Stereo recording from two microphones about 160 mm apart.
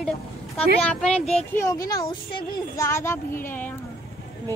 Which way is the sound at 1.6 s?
20° left (ahead or behind).